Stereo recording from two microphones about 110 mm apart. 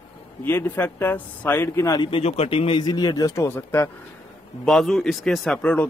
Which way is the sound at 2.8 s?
40° left (ahead or behind).